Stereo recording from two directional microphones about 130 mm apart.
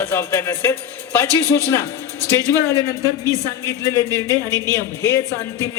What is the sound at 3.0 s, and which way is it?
Speech, 25° right (ahead or behind).